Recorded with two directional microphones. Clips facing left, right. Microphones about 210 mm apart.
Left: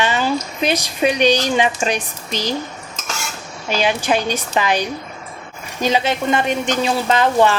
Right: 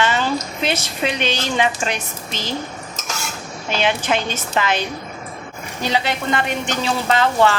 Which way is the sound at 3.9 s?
15° left (ahead or behind).